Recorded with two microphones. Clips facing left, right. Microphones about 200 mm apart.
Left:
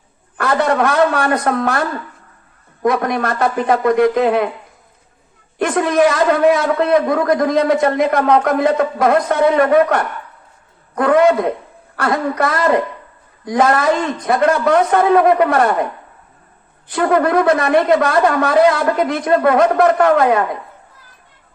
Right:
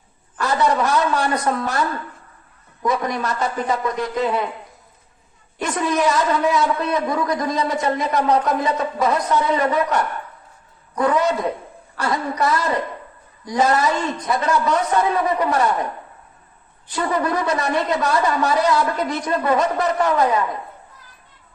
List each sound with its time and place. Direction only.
0.3 s a man's voice: 55° left (ahead or behind)
2.8 s a man's voice: 60° left (ahead or behind)
5.5 s a man's voice: 60° left (ahead or behind)
16.9 s a man's voice: 60° left (ahead or behind)